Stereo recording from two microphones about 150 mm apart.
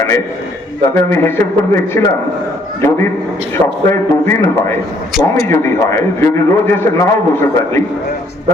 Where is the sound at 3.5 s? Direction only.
20° left (ahead or behind).